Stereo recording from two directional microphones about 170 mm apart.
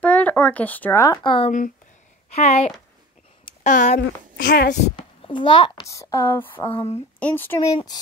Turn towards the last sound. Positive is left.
turn(degrees=10)  # may be behind; listen again after turning